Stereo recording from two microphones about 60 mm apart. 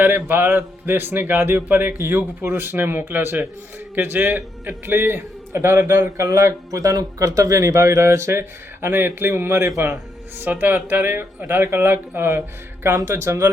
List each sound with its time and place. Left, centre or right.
0.0 s a man's voice: right